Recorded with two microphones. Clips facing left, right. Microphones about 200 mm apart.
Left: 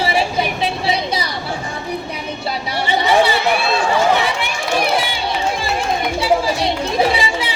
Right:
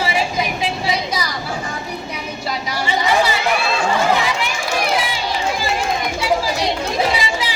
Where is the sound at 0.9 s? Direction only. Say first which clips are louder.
Left 2 dB; 30° left (ahead or behind).